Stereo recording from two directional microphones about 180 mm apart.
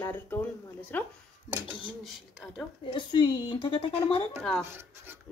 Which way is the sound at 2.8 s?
25° left (ahead or behind).